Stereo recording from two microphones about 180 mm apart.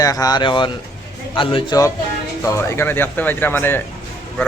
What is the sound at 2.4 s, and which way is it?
Speech, 15° left (ahead or behind).